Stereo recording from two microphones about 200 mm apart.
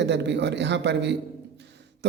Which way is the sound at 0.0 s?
60° right (ahead or behind).